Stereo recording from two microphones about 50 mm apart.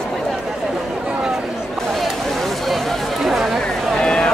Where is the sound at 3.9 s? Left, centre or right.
Centre.